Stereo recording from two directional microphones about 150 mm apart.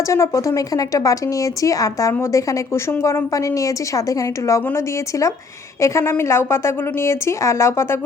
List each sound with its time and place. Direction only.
0.1 s a woman's voice: 20° left (ahead or behind)
5.8 s a woman's voice: 20° left (ahead or behind)